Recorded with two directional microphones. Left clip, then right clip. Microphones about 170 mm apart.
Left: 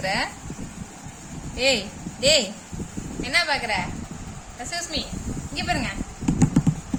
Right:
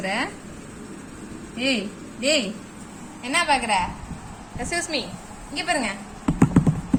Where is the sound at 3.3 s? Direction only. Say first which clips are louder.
Right 2 dB; centre (ahead or behind).